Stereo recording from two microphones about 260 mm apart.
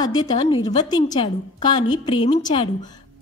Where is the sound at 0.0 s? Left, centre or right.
Centre.